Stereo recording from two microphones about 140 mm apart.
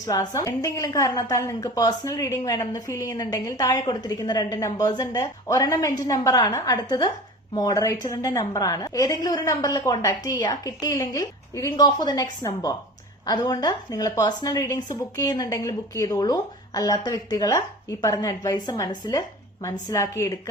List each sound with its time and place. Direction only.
0.0 s a woman's voice: 25° left (ahead or behind)